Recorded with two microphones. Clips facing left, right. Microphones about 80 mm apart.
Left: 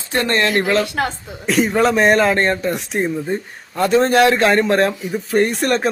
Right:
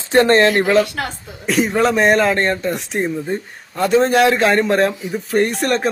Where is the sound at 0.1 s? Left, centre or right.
Right.